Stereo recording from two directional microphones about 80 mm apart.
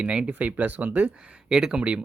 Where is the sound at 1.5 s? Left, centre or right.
Centre.